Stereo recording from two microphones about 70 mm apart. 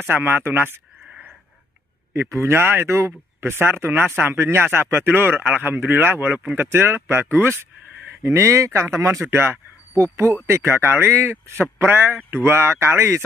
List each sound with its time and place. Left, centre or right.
0.0 s speech: right
2.1 s speech: right